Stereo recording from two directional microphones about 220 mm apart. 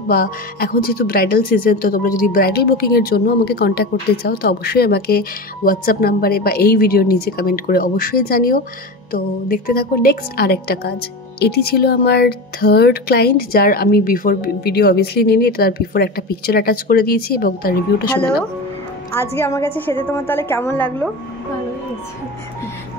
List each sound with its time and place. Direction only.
0.1 s speech: 45° left (ahead or behind)
19.1 s a woman's voice: 10° left (ahead or behind)